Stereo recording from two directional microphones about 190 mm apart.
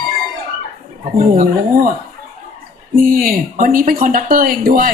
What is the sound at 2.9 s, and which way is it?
Speech, 50° right (ahead or behind).